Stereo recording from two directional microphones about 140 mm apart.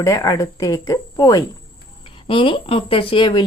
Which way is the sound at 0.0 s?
25° left (ahead or behind).